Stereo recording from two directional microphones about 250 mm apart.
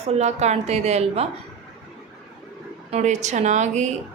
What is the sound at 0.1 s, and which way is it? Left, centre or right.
Speech, right.